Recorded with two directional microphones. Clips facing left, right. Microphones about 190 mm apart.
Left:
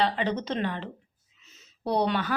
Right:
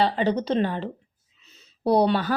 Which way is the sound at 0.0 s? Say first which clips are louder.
Right 4 dB; 35° right (ahead or behind).